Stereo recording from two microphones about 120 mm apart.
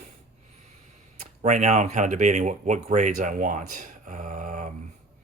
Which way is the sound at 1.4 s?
80° right.